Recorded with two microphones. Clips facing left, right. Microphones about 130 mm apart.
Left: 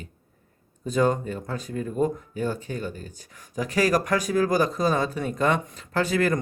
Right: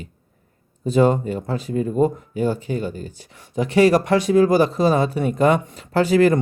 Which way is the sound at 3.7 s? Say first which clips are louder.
Right 7 dB; 25° right (ahead or behind).